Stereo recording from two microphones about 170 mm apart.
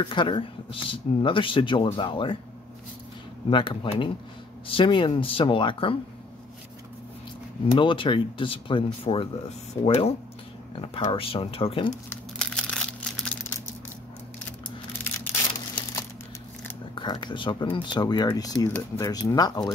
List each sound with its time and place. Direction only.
0.0 s speech: 30° left (ahead or behind)
3.4 s speech: 30° left (ahead or behind)
7.7 s speech: 30° left (ahead or behind)
12.4 s crumpling: 5° left (ahead or behind)
16.9 s a sound: 30° left (ahead or behind)
17.7 s speech: 25° left (ahead or behind)